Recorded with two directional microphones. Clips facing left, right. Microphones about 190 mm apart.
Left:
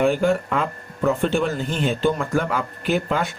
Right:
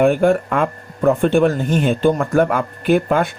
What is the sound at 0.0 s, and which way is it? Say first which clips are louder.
Speech: right 5 dB; 55° right (ahead or behind).